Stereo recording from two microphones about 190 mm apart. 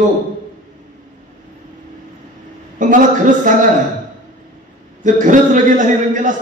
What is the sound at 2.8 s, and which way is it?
Speech, 45° right (ahead or behind).